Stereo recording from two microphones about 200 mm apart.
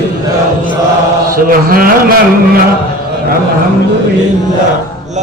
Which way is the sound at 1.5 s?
45° right (ahead or behind).